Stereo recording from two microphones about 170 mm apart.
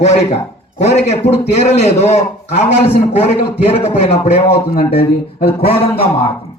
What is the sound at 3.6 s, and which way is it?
A man's voice, 35° left (ahead or behind).